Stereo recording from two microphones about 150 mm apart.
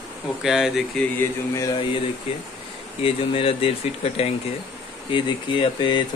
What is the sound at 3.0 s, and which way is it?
Speech, 40° left (ahead or behind).